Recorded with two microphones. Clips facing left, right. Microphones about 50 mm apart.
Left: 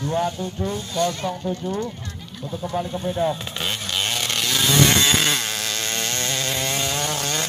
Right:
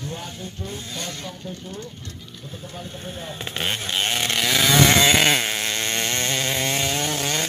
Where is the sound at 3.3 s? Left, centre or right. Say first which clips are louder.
Even; right; by 7.5 s centre.